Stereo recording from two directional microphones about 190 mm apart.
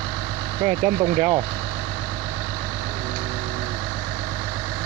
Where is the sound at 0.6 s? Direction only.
30° right (ahead or behind).